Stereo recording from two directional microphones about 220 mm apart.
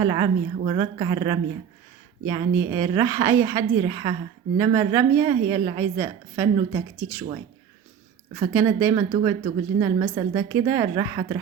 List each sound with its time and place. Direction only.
0.0 s a woman's voice: 20° right (ahead or behind)
8.4 s a woman's voice: 15° right (ahead or behind)